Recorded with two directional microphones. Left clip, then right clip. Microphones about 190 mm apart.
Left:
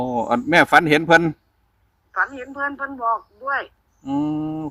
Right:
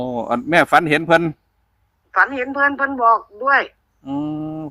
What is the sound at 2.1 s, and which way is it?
A woman's voice, 40° right (ahead or behind).